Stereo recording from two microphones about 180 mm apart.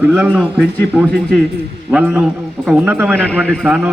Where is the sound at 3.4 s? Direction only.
Centre (ahead or behind).